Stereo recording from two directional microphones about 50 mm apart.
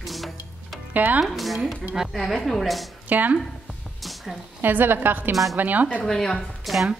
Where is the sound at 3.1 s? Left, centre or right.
Right.